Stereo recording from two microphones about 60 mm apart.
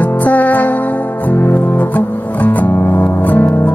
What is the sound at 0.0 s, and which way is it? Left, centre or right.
Music, left.